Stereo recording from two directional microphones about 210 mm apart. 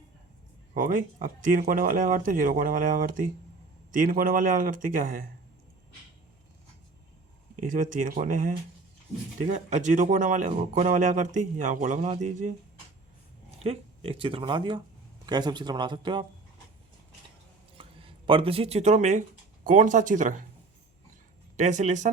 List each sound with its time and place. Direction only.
0.7 s speech: 40° right (ahead or behind)
7.6 s speech: 40° right (ahead or behind)
13.6 s speech: 30° right (ahead or behind)
17.7 s speech: 25° right (ahead or behind)
21.5 s speech: 35° right (ahead or behind)